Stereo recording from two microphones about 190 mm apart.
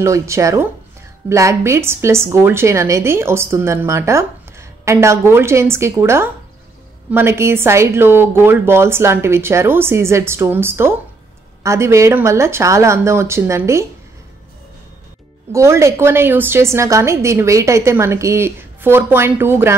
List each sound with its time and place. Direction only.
0.0 s a woman's voice: 15° right (ahead or behind)
15.5 s a woman's voice: 15° right (ahead or behind)